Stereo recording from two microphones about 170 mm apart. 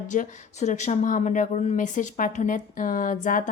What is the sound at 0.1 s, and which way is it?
A woman's voice, 45° left (ahead or behind).